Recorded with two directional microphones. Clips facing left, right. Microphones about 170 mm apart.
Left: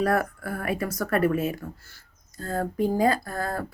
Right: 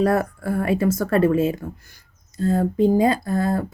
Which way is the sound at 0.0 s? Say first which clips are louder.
Right 4 dB; 25° right (ahead or behind).